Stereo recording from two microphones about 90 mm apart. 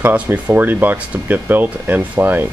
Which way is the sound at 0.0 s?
20° right (ahead or behind).